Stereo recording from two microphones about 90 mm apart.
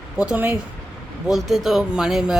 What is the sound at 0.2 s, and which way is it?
Speech, 15° right (ahead or behind).